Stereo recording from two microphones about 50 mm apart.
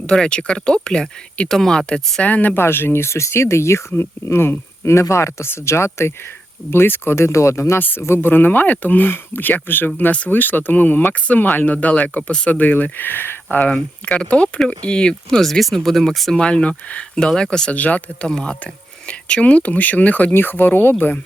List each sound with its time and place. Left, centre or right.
0.0 s speech: centre
2.2 s speech: left
2.6 s speech: left
3.9 s speech: left
4.8 s speech: left
5.5 s speech: left
6.7 s speech: left
7.8 s speech: left
13.6 s speech: left; by 16.0 s centre
16.3 s speech: centre
17.7 s speech: left
18.3 s speech: centre
18.6 s speech: left
20.3 s speech: left